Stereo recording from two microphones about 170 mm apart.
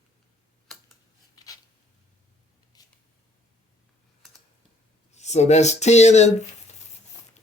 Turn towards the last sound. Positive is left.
turn(degrees=40)  # may be behind; listen again after turning